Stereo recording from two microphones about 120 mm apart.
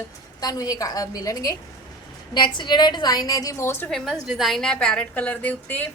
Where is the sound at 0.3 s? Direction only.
30° left (ahead or behind).